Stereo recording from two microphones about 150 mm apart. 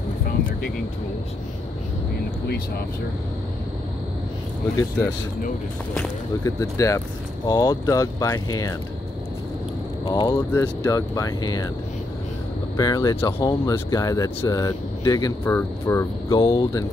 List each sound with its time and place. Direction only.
6.4 s speech: 20° left (ahead or behind)
10.0 s speech: 25° left (ahead or behind)
10.5 s speech: 15° left (ahead or behind)
12.7 s speech: 25° left (ahead or behind)